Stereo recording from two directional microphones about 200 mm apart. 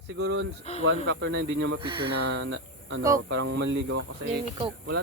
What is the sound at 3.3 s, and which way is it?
Speech, 65° right (ahead or behind).